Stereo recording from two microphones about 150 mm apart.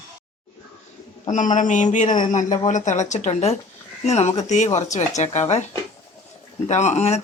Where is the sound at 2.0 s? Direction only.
30° left (ahead or behind).